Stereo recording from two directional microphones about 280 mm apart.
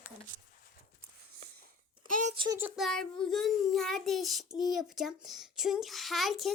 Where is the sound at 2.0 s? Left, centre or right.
Right.